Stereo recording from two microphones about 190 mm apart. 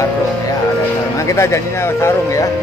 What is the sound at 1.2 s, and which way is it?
Speech, 15° left (ahead or behind).